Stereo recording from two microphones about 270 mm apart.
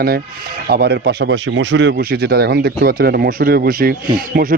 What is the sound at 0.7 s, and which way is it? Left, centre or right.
Speech, right.